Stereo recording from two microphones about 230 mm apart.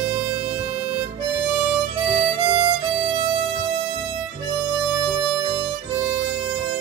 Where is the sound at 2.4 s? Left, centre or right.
Centre.